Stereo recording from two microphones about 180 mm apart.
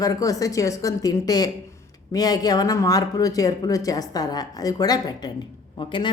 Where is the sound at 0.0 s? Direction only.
20° left (ahead or behind).